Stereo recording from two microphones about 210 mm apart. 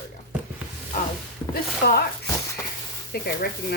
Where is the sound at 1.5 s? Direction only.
45° left (ahead or behind).